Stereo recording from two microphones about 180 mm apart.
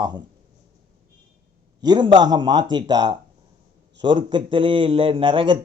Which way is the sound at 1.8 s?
25° right (ahead or behind).